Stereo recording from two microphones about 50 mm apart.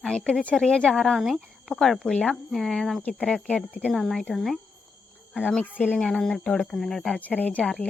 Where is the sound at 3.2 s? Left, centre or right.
Centre.